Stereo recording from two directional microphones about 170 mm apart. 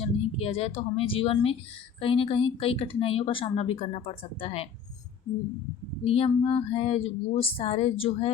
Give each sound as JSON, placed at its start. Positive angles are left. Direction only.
{"t": 0.0, "sound": "speech", "side_deg": 35}
{"t": 6.1, "sound": "speech", "side_deg": 35}